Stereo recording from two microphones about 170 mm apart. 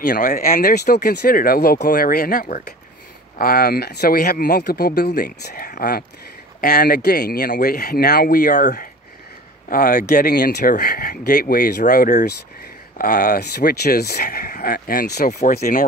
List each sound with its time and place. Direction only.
0.2 s speech: 55° left (ahead or behind)